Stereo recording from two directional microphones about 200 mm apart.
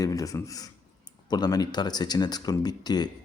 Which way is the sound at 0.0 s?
15° left (ahead or behind).